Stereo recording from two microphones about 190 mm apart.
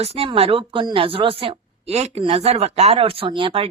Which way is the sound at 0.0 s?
30° right (ahead or behind).